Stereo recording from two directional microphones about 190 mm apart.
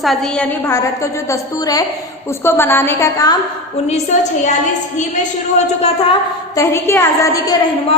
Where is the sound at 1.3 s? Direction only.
20° left (ahead or behind).